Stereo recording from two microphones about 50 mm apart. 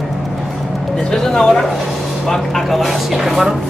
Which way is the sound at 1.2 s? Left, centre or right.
Centre.